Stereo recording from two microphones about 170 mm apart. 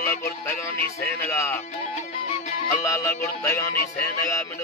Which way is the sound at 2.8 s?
15° left (ahead or behind).